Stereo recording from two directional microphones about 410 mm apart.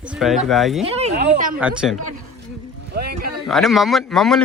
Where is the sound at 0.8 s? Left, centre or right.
Centre.